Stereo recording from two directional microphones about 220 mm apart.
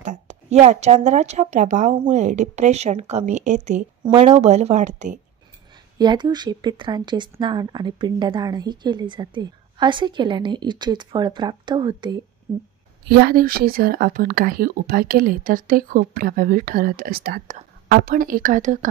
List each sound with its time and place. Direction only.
0.0 s speech: 35° right (ahead or behind)
5.9 s a woman's voice: 20° right (ahead or behind)
13.1 s speech: 45° right (ahead or behind)